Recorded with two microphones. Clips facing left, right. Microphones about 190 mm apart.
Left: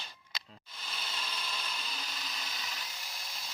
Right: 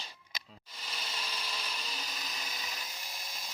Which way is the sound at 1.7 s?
5° right (ahead or behind).